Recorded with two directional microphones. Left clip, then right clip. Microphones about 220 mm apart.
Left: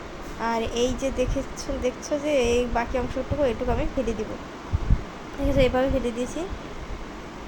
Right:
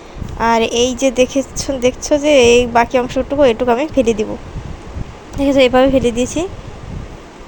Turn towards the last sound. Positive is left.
turn(degrees=-40)  # may be behind; listen again after turning